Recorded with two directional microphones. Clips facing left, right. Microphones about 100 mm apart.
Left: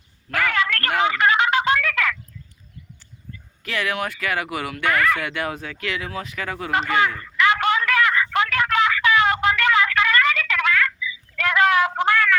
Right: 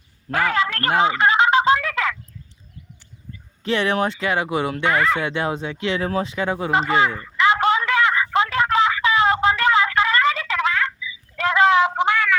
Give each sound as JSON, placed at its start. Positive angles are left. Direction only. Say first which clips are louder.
{"t": 0.3, "sound": "telephone", "louder": "right 2 dB", "side_deg": -25}
{"t": 3.6, "sound": "speech", "louder": "right 5 dB", "side_deg": -25}
{"t": 7.3, "sound": "a sound", "louder": "right 2 dB", "side_deg": -30}